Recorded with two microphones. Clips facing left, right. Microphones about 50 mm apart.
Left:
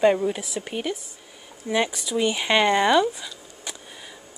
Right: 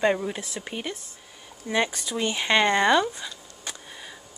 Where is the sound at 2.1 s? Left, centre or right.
Centre.